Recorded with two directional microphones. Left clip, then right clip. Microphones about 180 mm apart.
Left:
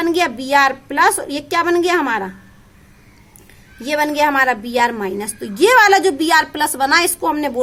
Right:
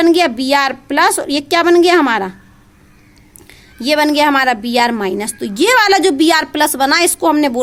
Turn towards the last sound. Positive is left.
turn(degrees=-50)  # may be behind; listen again after turning